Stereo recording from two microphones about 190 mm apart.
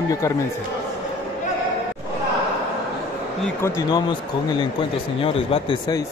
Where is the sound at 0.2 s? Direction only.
15° left (ahead or behind).